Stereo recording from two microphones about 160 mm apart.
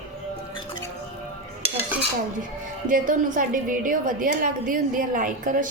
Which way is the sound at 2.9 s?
55° right (ahead or behind).